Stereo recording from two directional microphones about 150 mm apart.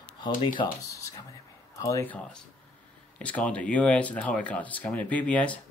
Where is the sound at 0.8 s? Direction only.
20° left (ahead or behind).